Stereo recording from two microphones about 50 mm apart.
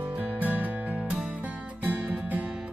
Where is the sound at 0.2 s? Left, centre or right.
Right.